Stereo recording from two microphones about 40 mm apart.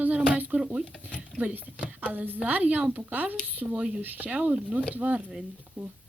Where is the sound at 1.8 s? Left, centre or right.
Right.